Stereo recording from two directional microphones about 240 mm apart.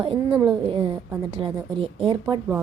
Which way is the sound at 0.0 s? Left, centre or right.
Right.